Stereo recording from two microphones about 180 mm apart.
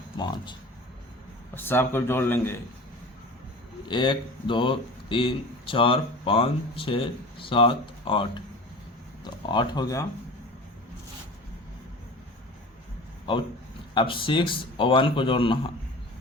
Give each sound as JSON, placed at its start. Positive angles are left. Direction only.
{"t": 0.2, "sound": "speech", "side_deg": 25}
{"t": 1.5, "sound": "speech", "side_deg": 10}
{"t": 3.8, "sound": "speech", "side_deg": 25}
{"t": 13.9, "sound": "speech", "side_deg": 30}